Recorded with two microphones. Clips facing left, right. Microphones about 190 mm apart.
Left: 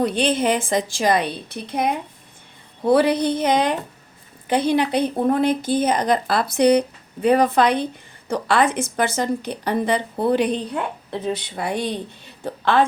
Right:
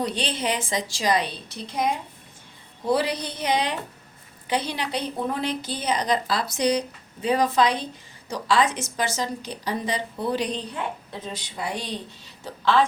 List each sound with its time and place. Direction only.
0.0 s a woman's voice: 55° left (ahead or behind)